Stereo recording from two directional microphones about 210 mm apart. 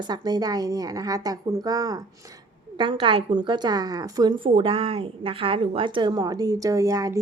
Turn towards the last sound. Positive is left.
turn(degrees=-15)  # may be behind; listen again after turning